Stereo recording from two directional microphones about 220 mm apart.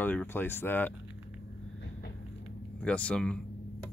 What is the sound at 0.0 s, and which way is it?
Speech, 10° left (ahead or behind).